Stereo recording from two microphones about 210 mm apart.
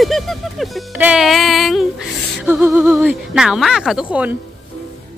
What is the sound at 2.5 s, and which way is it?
Speech, 10° right (ahead or behind).